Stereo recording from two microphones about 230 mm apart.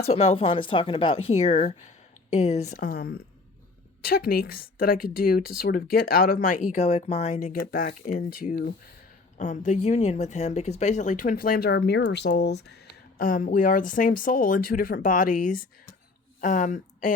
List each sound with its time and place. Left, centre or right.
0.0 s a woman's voice: left